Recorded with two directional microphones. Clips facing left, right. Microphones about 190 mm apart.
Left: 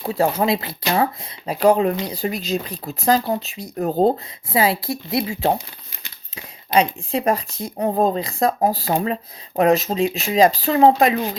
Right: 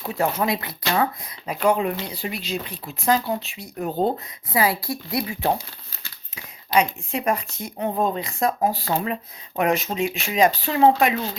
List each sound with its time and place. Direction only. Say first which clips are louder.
0.0 s speech: left 4 dB; 30° left (ahead or behind)
4.5 s speech: left 3 dB; 25° left (ahead or behind)
6.7 s speech: left 3 dB; 30° left (ahead or behind)